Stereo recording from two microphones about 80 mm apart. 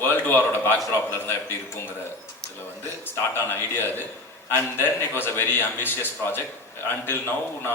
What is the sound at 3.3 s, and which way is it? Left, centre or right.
A man's voice, left.